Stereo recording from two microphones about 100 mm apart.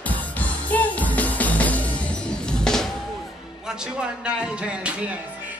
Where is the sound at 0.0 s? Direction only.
15° left (ahead or behind).